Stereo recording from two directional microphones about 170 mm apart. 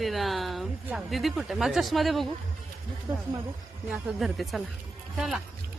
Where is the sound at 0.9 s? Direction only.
5° right (ahead or behind).